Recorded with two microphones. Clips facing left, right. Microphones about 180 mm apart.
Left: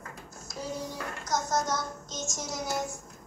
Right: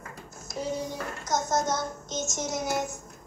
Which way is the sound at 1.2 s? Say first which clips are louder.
Right 2 dB; 20° right (ahead or behind).